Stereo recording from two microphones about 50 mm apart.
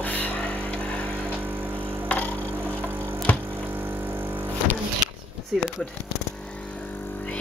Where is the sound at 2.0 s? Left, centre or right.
Left.